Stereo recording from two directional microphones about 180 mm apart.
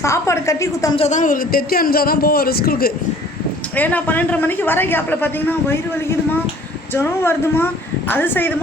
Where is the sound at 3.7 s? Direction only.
10° left (ahead or behind).